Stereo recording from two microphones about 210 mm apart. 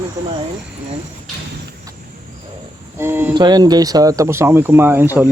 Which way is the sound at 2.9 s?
10° right (ahead or behind).